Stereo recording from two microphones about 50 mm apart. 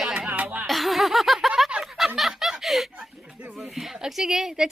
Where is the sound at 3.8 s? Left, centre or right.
Centre.